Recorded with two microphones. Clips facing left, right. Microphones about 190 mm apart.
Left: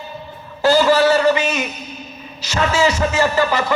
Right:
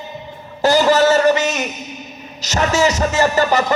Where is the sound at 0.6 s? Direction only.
20° right (ahead or behind).